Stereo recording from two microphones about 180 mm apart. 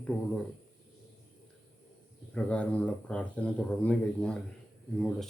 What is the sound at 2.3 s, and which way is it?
A man's voice, 5° left (ahead or behind).